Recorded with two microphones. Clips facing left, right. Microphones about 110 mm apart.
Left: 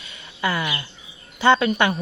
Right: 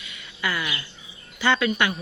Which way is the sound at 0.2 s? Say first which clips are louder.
Left 4 dB; 25° left (ahead or behind).